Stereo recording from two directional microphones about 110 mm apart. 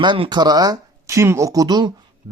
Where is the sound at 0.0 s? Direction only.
45° right (ahead or behind).